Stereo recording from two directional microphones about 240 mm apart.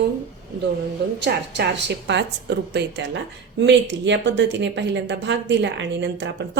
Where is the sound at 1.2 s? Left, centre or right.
Right.